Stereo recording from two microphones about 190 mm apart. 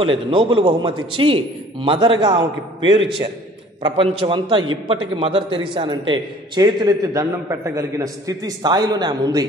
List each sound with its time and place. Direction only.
0.3 s a man's voice: 25° right (ahead or behind)